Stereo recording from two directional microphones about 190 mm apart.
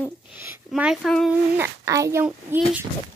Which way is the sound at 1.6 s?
15° right (ahead or behind).